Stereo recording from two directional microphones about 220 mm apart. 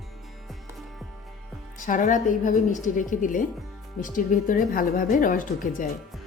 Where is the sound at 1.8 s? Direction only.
35° left (ahead or behind).